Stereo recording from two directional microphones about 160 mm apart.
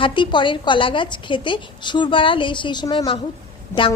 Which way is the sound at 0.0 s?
30° left (ahead or behind).